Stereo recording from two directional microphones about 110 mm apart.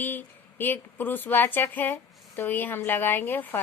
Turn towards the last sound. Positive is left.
turn(degrees=20)  # may be behind; listen again after turning